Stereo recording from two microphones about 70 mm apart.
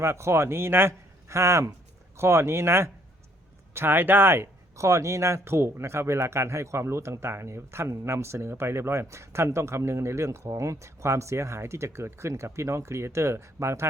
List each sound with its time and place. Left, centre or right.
0.0 s speech: right